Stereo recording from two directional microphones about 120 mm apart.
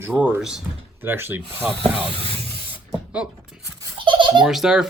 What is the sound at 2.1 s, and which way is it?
Speech, 55° right (ahead or behind).